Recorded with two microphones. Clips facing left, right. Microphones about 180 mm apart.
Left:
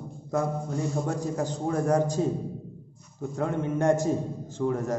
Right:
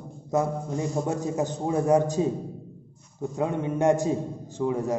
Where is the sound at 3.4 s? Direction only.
15° right (ahead or behind).